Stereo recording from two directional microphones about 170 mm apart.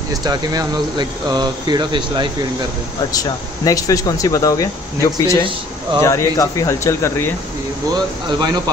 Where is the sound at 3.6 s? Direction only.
20° left (ahead or behind).